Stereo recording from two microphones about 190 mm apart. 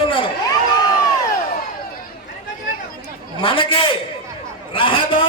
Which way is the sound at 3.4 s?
25° left (ahead or behind).